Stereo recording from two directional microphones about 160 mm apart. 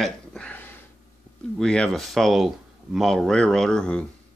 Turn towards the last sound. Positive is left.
turn(degrees=5)  # may be behind; listen again after turning